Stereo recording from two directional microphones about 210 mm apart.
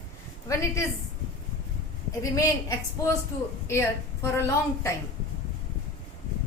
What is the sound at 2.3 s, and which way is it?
A woman's voice, 15° left (ahead or behind).